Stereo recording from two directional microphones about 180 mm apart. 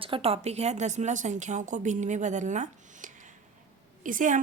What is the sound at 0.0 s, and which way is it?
Speech, 30° right (ahead or behind).